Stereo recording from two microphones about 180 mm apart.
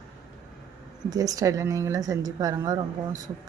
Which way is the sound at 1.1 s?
20° right (ahead or behind).